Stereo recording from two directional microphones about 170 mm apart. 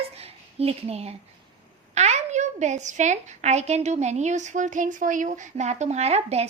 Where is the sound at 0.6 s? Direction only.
35° right (ahead or behind).